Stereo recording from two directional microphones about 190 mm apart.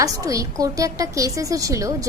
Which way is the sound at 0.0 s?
15° right (ahead or behind).